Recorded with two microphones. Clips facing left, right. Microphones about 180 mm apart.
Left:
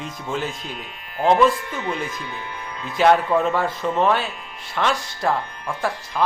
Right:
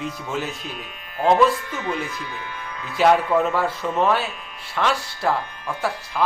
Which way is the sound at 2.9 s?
5° right (ahead or behind).